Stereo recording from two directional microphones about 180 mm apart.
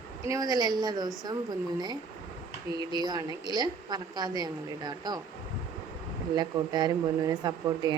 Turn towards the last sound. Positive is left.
turn(degrees=-25)  # may be behind; listen again after turning